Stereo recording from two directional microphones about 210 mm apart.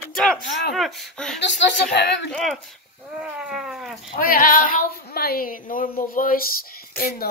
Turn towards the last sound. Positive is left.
turn(degrees=45)  # may be behind; listen again after turning